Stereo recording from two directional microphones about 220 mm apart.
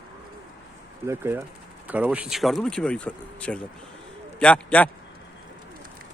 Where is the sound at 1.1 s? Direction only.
10° right (ahead or behind); by 4.9 s 5° left (ahead or behind).